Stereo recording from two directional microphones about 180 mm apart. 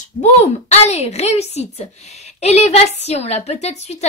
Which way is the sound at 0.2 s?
40° left (ahead or behind).